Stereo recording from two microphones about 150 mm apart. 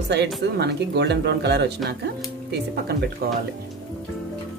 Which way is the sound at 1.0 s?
90° right.